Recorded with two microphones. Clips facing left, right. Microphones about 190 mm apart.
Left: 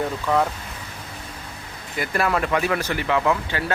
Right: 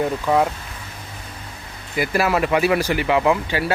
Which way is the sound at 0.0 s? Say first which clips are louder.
Right 3 dB; 15° right (ahead or behind).